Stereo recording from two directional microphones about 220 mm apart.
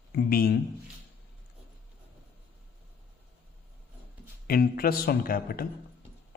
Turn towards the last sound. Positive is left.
turn(degrees=45)  # may be behind; listen again after turning